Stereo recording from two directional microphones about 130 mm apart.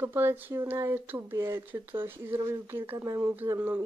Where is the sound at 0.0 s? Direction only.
15° right (ahead or behind).